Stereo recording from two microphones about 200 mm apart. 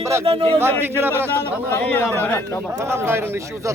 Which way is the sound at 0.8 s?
10° right (ahead or behind).